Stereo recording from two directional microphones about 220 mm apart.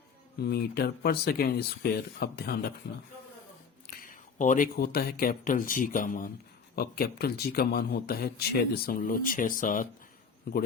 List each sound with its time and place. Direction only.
0.4 s a man's voice: 45° left (ahead or behind)
3.8 s a man's voice: 35° left (ahead or behind)